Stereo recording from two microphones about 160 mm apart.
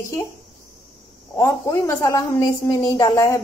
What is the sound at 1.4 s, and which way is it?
A woman's voice, 15° left (ahead or behind).